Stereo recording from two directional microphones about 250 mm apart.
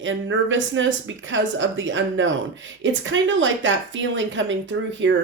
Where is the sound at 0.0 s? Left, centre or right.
Right.